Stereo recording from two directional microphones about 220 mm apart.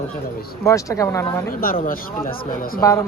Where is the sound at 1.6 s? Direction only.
40° left (ahead or behind).